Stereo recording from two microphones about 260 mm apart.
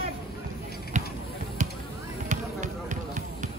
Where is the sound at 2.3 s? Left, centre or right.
Right.